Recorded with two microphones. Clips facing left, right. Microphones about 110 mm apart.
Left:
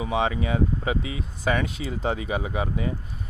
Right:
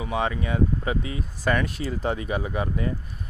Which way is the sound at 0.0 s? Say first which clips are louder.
Left 2 dB; 20° left (ahead or behind).